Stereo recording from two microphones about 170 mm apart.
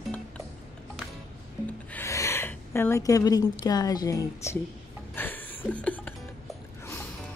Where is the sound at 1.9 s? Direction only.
15° left (ahead or behind).